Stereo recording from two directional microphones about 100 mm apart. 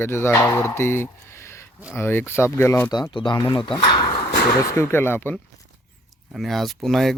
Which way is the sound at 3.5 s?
60° left (ahead or behind).